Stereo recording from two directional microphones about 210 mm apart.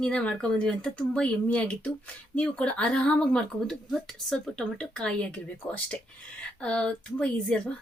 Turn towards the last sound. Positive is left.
turn(degrees=5)  # may be behind; listen again after turning